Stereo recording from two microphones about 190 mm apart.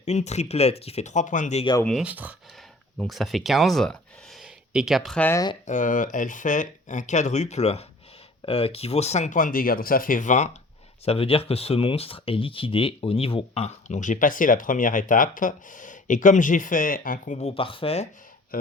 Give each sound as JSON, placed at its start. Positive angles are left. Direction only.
{"t": 0.0, "sound": "speech", "side_deg": 35}
{"t": 1.8, "sound": "speech", "side_deg": 0}
{"t": 5.6, "sound": "speech", "side_deg": 45}
{"t": 18.5, "sound": "speech", "side_deg": 50}